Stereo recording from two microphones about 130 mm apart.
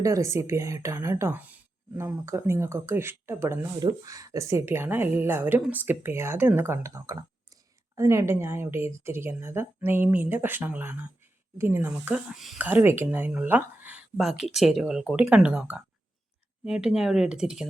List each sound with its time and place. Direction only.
0.0 s speech: 25° right (ahead or behind)
3.8 s speech: 30° right (ahead or behind); by 12.6 s 5° right (ahead or behind)
12.6 s speech: 15° right (ahead or behind)